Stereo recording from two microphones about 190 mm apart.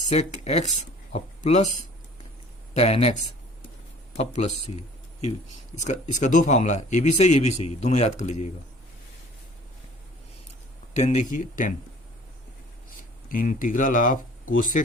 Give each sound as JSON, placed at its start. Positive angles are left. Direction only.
{"t": 0.1, "sound": "a man's voice", "side_deg": 35}
{"t": 4.2, "sound": "a man's voice", "side_deg": 40}
{"t": 10.9, "sound": "a man's voice", "side_deg": 40}
{"t": 13.2, "sound": "speech", "side_deg": 45}